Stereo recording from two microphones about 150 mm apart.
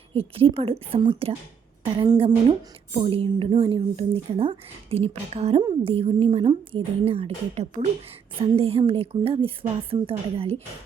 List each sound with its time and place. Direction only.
0.1 s speech: 40° right (ahead or behind)